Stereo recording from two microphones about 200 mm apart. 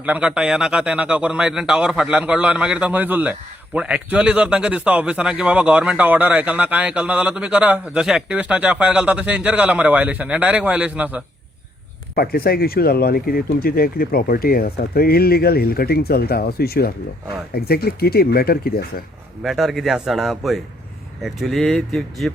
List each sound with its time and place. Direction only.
0.0 s a man's voice: 5° right (ahead or behind)
12.1 s speech: 50° left (ahead or behind)
19.4 s a man's voice: centre (ahead or behind)